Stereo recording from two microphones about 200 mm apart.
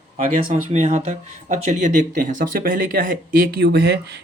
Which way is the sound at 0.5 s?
35° right (ahead or behind).